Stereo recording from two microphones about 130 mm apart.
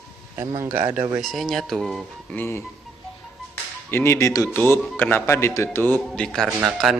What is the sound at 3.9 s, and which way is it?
Speech, 20° left (ahead or behind).